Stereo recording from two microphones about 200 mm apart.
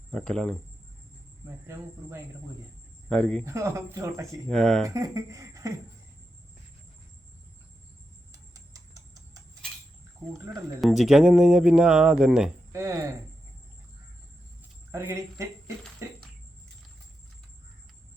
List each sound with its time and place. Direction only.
0.1 s speech: 5° left (ahead or behind)
1.5 s speech: 15° right (ahead or behind)
3.1 s speech: 5° left (ahead or behind)
3.4 s speech: 15° right (ahead or behind)
4.4 s speech: 5° left (ahead or behind)
4.9 s speech: 15° right (ahead or behind)
8.3 s a sound: 15° right (ahead or behind)
10.8 s speech: centre (ahead or behind)
12.7 s speech: 15° right (ahead or behind)
14.9 s speech: 15° right (ahead or behind)